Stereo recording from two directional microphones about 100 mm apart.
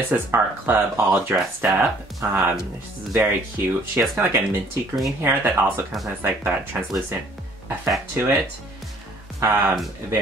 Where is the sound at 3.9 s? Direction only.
20° right (ahead or behind).